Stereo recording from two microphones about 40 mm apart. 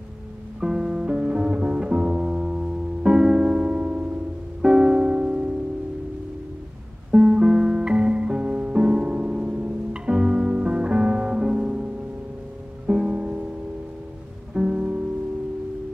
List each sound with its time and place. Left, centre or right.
0.6 s music: centre
4.6 s music: centre
7.1 s music: centre
14.5 s music: right